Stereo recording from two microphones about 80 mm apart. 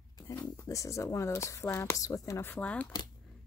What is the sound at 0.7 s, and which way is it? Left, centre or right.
Speech, left.